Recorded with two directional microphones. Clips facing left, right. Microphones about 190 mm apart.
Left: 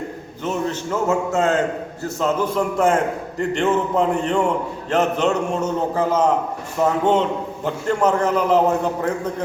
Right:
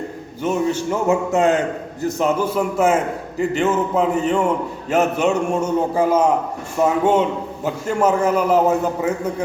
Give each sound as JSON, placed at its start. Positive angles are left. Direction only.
{"t": 0.4, "sound": "a man's voice", "side_deg": -10}